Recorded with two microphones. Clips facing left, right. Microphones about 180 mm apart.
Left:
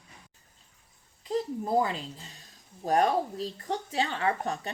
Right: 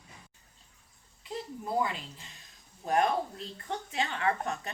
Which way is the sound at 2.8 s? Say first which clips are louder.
Left 3 dB; 35° left (ahead or behind).